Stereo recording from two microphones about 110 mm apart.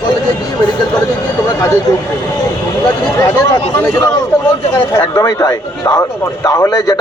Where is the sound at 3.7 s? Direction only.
15° left (ahead or behind).